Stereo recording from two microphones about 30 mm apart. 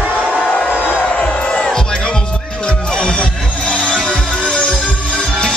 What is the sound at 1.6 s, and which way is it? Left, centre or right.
Music, left.